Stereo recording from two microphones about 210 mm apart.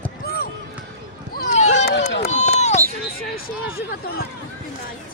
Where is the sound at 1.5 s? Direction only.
35° left (ahead or behind).